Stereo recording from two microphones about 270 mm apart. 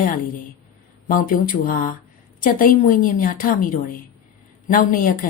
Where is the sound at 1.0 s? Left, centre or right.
Left.